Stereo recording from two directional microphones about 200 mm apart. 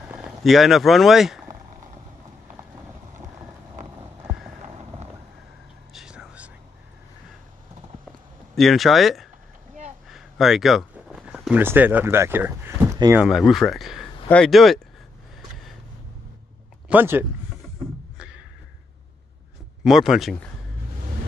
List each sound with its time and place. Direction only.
0.1 s speech: centre (ahead or behind)
4.6 s clip-clop: 30° right (ahead or behind)
5.9 s whispering: 5° right (ahead or behind)
8.5 s speech: centre (ahead or behind)
13.2 s speech: centre (ahead or behind)
16.9 s speech: 10° right (ahead or behind)
18.1 s a sound: 5° right (ahead or behind)
19.8 s speech: centre (ahead or behind)